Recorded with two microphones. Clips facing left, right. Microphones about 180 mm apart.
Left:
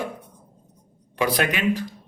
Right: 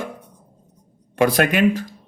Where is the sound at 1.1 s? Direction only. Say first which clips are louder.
Right 6 dB; 50° right (ahead or behind).